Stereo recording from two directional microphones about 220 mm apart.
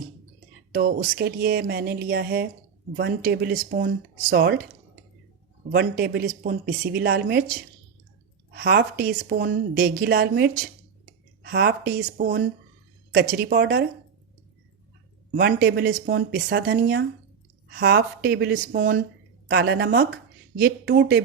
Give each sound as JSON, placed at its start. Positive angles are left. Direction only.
{"t": 0.7, "sound": "a woman's voice", "side_deg": -45}
{"t": 5.7, "sound": "a woman's voice", "side_deg": -45}
{"t": 8.5, "sound": "a woman's voice", "side_deg": -50}
{"t": 15.4, "sound": "a woman's voice", "side_deg": -45}